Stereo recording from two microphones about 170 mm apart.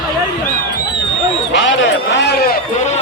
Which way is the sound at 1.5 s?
90° left.